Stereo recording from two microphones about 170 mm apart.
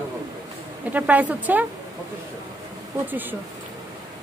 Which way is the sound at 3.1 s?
10° right (ahead or behind).